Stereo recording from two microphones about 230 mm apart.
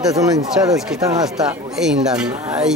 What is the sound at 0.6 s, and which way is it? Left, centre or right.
Speech, centre.